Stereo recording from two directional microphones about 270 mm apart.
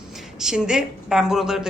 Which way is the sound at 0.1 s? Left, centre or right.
Centre.